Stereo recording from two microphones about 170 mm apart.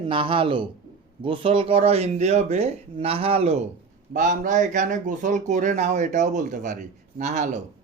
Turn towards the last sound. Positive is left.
turn(degrees=-45)  # may be behind; listen again after turning